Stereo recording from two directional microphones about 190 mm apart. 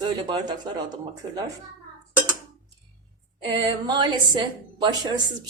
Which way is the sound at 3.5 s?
25° right (ahead or behind).